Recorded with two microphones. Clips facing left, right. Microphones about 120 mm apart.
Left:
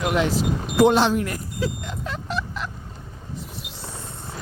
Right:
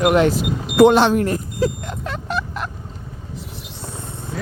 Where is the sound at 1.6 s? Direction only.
55° right (ahead or behind).